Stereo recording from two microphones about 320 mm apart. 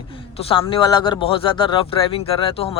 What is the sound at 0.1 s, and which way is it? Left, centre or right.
Speech, centre.